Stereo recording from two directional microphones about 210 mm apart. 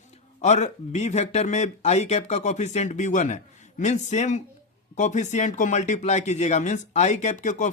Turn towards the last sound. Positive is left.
turn(degrees=35)  # may be behind; listen again after turning